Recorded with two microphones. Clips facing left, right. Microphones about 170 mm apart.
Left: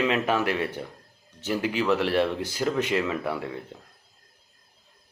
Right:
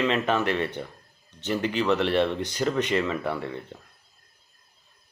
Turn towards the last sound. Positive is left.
turn(degrees=5)  # may be behind; listen again after turning